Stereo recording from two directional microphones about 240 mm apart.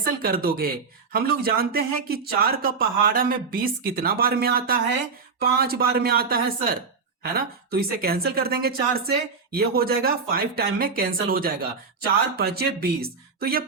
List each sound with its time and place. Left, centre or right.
0.0 s speech: right